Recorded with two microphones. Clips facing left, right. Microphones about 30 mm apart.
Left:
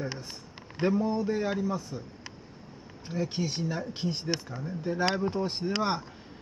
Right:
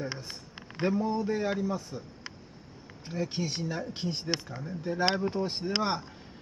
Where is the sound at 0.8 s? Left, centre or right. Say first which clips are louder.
Left 1 dB; centre.